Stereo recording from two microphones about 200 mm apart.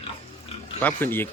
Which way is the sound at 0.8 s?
10° left (ahead or behind).